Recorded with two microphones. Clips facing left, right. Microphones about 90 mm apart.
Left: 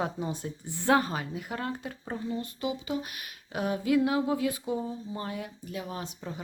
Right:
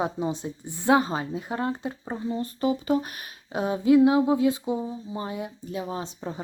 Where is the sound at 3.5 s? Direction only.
25° right (ahead or behind).